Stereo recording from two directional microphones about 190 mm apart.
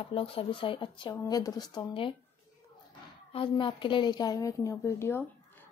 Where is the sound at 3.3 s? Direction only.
25° left (ahead or behind).